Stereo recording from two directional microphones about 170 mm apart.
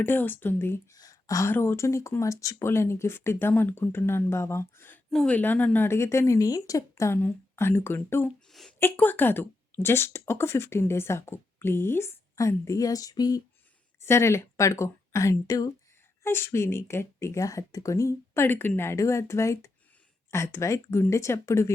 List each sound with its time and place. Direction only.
0.0 s speech: 10° left (ahead or behind)